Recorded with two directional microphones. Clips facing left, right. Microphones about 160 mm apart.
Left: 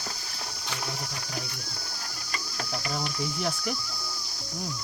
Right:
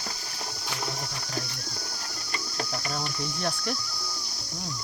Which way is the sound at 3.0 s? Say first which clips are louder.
Left 2 dB; 10° left (ahead or behind).